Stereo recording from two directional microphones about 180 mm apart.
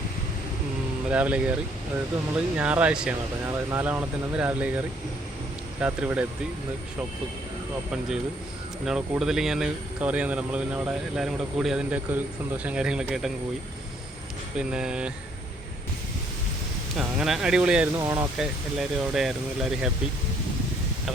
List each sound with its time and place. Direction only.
1.1 s speech: 5° right (ahead or behind)
2.6 s speech: 5° right (ahead or behind)
5.8 s speech: 5° right (ahead or behind)
8.8 s speech: 5° right (ahead or behind)
14.5 s speech: 5° right (ahead or behind)
17.0 s speech: centre (ahead or behind)
17.9 s speech: 15° right (ahead or behind)
18.3 s speech: centre (ahead or behind)